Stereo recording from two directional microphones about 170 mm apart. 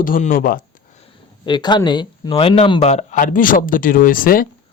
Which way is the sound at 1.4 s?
25° left (ahead or behind).